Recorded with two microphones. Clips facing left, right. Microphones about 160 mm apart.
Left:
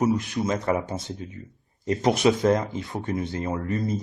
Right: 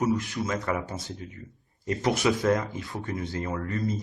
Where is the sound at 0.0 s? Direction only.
20° left (ahead or behind).